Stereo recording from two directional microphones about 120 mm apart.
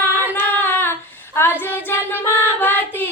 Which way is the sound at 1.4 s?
20° left (ahead or behind).